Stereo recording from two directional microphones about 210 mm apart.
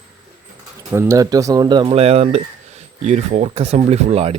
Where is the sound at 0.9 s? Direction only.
15° right (ahead or behind).